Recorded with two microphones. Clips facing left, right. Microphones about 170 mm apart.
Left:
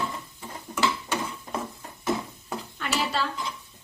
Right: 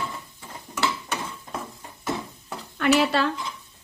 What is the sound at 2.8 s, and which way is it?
Dishes, 65° right (ahead or behind).